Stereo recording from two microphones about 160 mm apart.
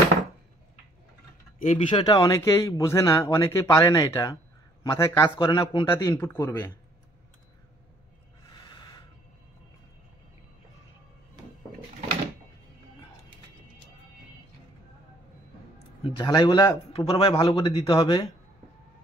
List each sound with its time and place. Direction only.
1.6 s speech: 45° left (ahead or behind)
1.9 s a man's voice: 25° left (ahead or behind)
5.5 s a man's voice: 30° left (ahead or behind)
5.9 s a man's voice: 20° left (ahead or behind)
16.0 s a man's voice: 30° left (ahead or behind)